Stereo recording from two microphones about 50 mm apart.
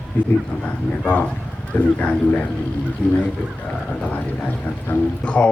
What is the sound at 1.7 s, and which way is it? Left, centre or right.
Speech, left.